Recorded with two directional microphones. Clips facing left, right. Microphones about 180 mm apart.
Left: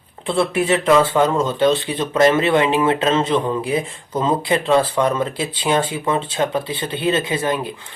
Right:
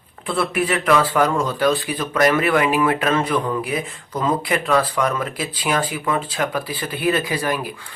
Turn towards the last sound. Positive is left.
turn(degrees=25)  # may be behind; listen again after turning